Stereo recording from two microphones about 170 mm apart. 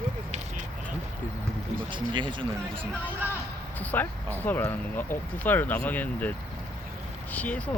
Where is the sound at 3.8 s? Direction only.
10° left (ahead or behind).